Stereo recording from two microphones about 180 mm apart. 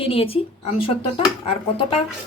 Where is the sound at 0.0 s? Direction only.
30° left (ahead or behind).